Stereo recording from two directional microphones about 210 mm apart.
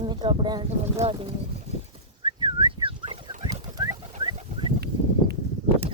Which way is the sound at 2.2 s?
20° right (ahead or behind).